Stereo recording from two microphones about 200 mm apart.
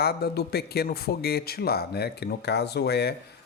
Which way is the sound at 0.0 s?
50° left (ahead or behind).